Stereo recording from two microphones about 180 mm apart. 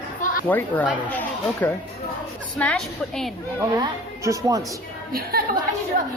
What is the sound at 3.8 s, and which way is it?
Speech, 20° right (ahead or behind).